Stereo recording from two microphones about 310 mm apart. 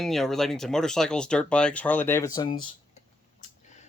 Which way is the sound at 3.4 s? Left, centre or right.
Left.